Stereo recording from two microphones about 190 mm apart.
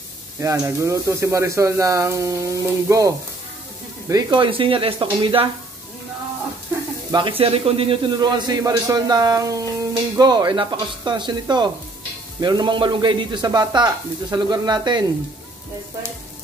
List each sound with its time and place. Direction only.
0.4 s a man's voice: 15° right (ahead or behind)
7.1 s a man's voice: 25° right (ahead or behind)